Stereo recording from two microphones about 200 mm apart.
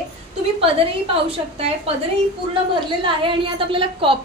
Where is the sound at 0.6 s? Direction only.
30° right (ahead or behind).